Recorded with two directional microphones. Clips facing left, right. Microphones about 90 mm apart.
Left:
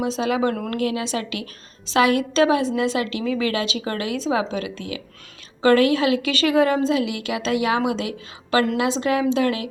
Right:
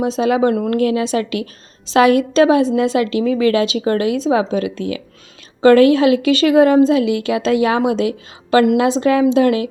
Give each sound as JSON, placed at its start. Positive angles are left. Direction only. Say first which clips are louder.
{"t": 0.0, "sound": "a woman's voice", "louder": "right 6 dB", "side_deg": -35}